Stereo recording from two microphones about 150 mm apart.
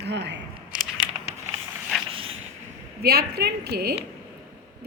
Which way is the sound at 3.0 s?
90° right.